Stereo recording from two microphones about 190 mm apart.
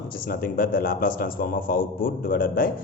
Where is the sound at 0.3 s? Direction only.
50° left (ahead or behind).